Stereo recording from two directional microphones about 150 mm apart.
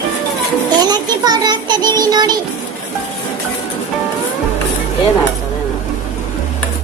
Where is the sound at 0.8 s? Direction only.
25° right (ahead or behind).